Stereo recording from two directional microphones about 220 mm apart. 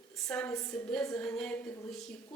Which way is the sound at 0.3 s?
5° left (ahead or behind).